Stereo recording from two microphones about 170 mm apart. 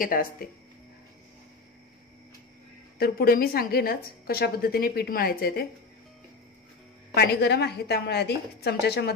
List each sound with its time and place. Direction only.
0.0 s a woman's voice: 55° left (ahead or behind)
3.0 s a woman's voice: 60° left (ahead or behind)
7.2 s a woman's voice: 75° left (ahead or behind)